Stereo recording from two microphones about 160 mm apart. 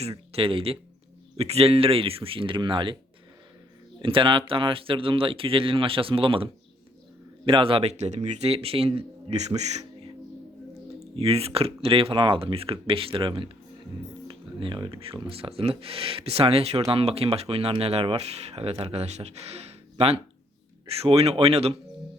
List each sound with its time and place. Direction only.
0.3 s speech: 35° right (ahead or behind)
4.0 s speech: 35° right (ahead or behind)
11.2 s speech: 40° right (ahead or behind)
14.3 s music: 30° right (ahead or behind)
15.3 s speech: 35° right (ahead or behind)